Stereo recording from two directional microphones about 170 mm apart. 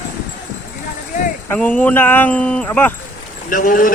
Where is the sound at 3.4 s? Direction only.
55° left (ahead or behind).